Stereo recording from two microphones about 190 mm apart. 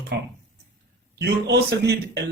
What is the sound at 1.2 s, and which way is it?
A man's voice, 65° right (ahead or behind).